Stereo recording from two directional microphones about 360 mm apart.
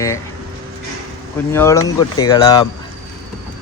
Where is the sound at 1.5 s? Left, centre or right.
Centre.